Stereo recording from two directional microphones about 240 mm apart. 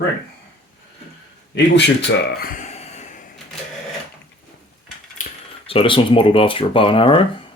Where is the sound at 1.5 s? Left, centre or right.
Left.